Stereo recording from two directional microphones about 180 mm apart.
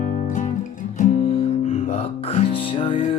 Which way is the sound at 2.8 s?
30° left (ahead or behind).